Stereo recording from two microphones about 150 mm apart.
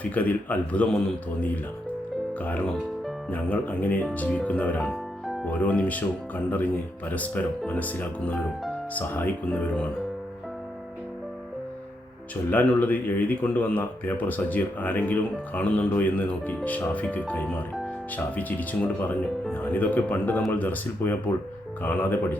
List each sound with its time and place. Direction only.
0.0 s speech: 10° left (ahead or behind)
2.4 s speech: 10° left (ahead or behind)
12.5 s speech: 10° left (ahead or behind)